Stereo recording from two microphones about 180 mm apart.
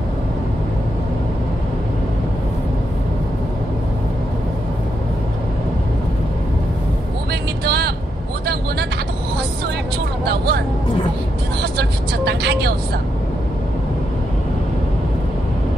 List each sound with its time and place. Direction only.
7.6 s vehicle: 65° right (ahead or behind)
10.2 s music: 60° right (ahead or behind)
12.3 s vehicle: 65° right (ahead or behind)